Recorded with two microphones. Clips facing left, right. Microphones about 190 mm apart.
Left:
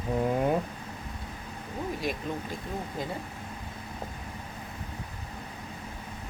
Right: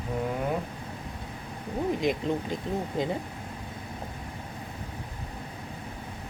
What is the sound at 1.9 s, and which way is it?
Speech, 20° right (ahead or behind).